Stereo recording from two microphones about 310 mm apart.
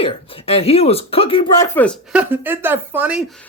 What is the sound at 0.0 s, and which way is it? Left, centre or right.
Speech, centre.